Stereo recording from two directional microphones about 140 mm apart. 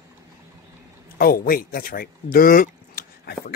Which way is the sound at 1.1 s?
90° left.